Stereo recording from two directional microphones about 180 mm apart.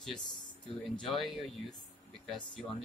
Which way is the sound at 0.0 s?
Centre (ahead or behind).